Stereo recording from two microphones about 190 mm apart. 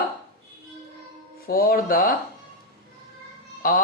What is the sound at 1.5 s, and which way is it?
Speech, 50° left (ahead or behind).